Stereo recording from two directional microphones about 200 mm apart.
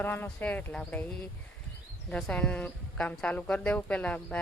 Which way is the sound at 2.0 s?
5° left (ahead or behind).